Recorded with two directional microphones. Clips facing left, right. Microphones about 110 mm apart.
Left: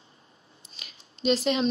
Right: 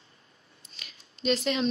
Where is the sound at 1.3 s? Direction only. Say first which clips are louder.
Left 3 dB; 30° left (ahead or behind).